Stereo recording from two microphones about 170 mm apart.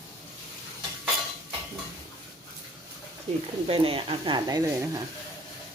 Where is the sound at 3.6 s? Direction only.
35° right (ahead or behind).